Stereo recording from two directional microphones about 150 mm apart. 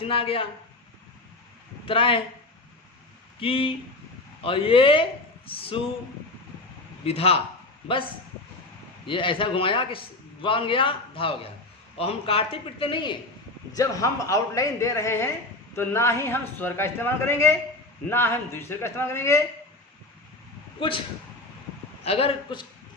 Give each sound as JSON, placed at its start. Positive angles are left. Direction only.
{"t": 0.0, "sound": "a man's voice", "side_deg": 35}
{"t": 1.8, "sound": "speech", "side_deg": 35}
{"t": 3.4, "sound": "a man's voice", "side_deg": 35}
{"t": 7.0, "sound": "a man's voice", "side_deg": 40}
{"t": 9.0, "sound": "a man's voice", "side_deg": 35}
{"t": 13.7, "sound": "a man's voice", "side_deg": 20}
{"t": 20.7, "sound": "speech", "side_deg": 35}
{"t": 22.0, "sound": "a man's voice", "side_deg": 40}